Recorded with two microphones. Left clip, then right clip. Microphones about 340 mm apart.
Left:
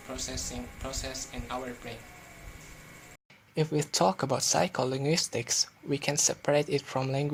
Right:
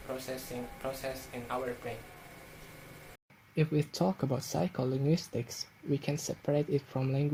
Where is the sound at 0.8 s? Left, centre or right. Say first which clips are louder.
Even; centre.